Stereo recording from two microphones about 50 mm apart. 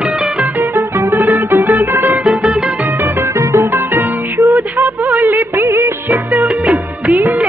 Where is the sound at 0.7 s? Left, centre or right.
Right.